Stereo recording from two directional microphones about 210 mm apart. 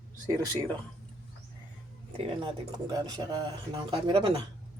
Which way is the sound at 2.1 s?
25° right (ahead or behind).